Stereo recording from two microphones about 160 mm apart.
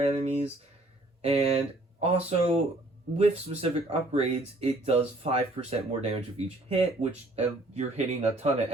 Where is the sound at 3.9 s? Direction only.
40° right (ahead or behind).